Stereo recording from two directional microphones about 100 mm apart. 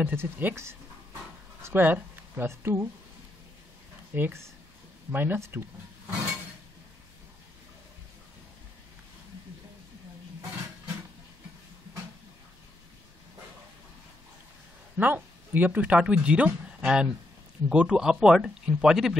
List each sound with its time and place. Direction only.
0.0 s speech: 20° right (ahead or behind)
4.1 s speech: 25° right (ahead or behind)
15.0 s speech: 20° right (ahead or behind)